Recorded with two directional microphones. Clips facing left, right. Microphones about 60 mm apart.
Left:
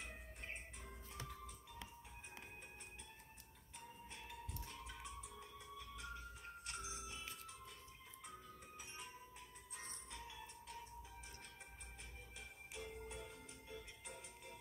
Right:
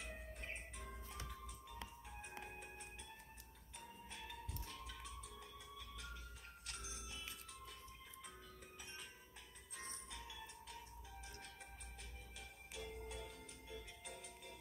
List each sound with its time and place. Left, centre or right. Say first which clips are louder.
4.6 s music: even; left
10.1 s music: even; left
12.4 s music: even; left